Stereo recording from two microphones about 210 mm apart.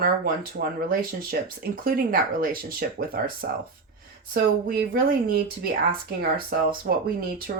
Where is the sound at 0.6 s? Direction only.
45° right (ahead or behind).